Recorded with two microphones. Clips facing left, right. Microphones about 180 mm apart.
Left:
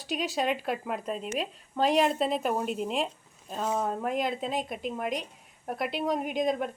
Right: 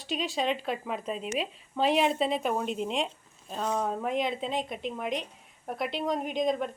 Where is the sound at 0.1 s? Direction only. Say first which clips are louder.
Left 1 dB; 5° left (ahead or behind).